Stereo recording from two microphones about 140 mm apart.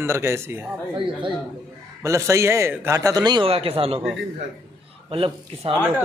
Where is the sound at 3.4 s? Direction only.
45° right (ahead or behind).